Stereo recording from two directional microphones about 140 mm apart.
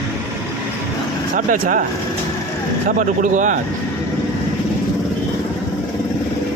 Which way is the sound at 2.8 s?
70° right (ahead or behind).